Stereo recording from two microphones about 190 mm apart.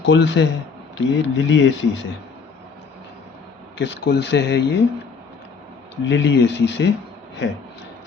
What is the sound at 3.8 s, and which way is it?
Speech, 65° left (ahead or behind).